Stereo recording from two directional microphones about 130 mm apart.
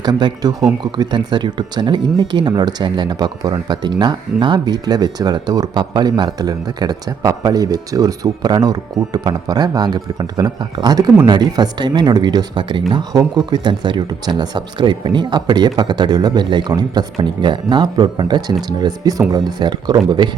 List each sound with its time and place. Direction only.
0.0 s speech: 35° right (ahead or behind)